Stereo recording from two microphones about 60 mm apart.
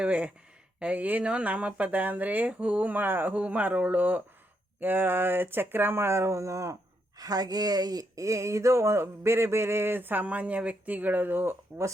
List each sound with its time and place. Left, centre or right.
0.0 s speech: centre; by 6.7 s right
7.2 s speech: right